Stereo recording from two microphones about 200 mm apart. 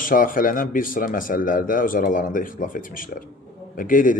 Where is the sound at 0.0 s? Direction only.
45° left (ahead or behind).